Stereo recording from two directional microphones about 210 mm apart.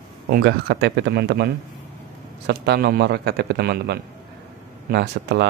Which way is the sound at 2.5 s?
50° right (ahead or behind).